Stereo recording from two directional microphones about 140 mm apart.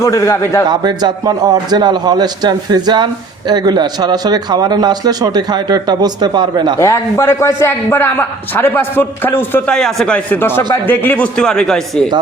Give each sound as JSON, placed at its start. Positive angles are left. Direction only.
{"t": 0.0, "sound": "a man's voice", "side_deg": 20}
{"t": 0.7, "sound": "a man's voice", "side_deg": -30}
{"t": 6.7, "sound": "a man's voice", "side_deg": 20}
{"t": 9.7, "sound": "a man's voice", "side_deg": 5}
{"t": 10.3, "sound": "a man's voice", "side_deg": 15}